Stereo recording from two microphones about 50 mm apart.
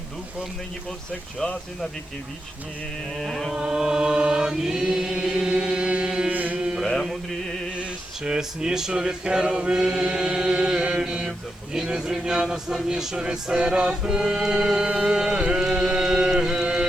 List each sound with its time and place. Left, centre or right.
3.2 s mantra: centre
3.5 s a sound: centre
5.2 s chant: centre
6.3 s mantra: right
6.6 s mantra: centre
7.8 s a sound: centre
15.4 s carnatic music: centre